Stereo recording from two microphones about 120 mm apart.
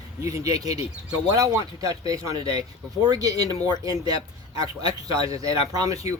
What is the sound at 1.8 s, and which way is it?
Speech, 30° right (ahead or behind).